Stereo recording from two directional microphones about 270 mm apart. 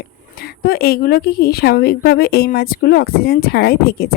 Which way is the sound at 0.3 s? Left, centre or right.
Left.